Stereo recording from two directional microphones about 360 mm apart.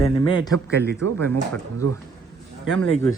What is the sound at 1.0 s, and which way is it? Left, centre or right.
Speech, right.